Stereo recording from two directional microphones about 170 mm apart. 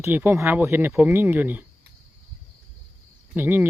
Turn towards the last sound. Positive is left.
turn(degrees=-10)  # may be behind; listen again after turning